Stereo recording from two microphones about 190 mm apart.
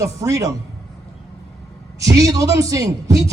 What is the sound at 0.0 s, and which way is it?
Speech, 15° right (ahead or behind).